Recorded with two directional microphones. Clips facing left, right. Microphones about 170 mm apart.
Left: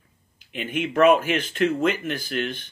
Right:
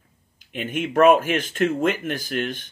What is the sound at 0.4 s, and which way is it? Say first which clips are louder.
Speech: right 1 dB; 45° right (ahead or behind).